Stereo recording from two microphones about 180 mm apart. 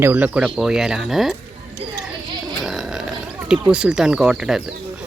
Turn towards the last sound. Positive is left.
turn(degrees=-5)  # may be behind; listen again after turning